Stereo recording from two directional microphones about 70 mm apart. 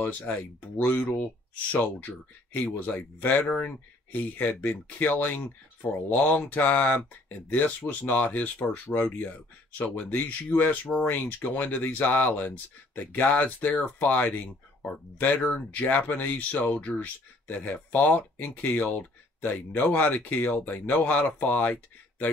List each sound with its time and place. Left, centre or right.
0.3 s speech: left